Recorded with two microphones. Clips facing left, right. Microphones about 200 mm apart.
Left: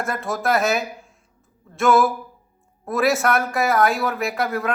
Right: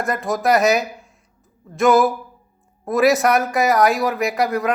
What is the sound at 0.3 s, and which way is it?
Speech, centre (ahead or behind).